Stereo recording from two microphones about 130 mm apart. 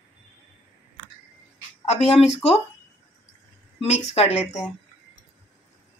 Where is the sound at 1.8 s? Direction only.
55° left (ahead or behind).